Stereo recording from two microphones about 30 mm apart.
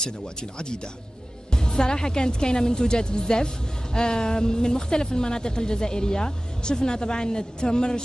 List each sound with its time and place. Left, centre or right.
0.0 s speech: left